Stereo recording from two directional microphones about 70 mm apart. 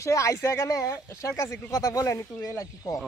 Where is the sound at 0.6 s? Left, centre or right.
Left.